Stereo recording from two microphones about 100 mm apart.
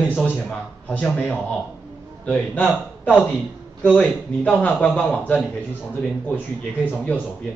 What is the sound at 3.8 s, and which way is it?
A man's voice, 15° left (ahead or behind).